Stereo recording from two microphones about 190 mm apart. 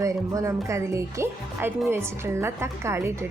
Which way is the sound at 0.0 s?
15° right (ahead or behind).